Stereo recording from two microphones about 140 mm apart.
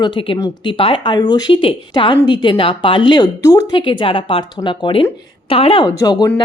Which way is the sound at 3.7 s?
35° left (ahead or behind).